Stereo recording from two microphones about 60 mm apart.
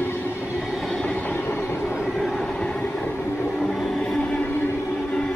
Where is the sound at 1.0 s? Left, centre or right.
Left.